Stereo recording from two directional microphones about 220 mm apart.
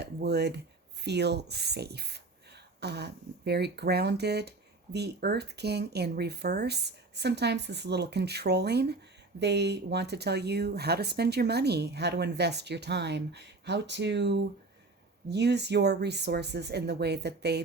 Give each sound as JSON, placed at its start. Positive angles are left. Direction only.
{"t": 0.0, "sound": "speech", "side_deg": -50}